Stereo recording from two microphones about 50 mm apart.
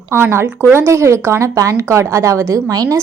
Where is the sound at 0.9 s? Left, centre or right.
Right.